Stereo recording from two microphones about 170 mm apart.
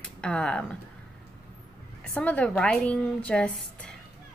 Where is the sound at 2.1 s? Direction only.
10° left (ahead or behind).